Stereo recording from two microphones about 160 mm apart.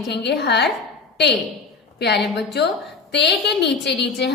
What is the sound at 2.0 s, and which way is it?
A woman's voice, 90° left.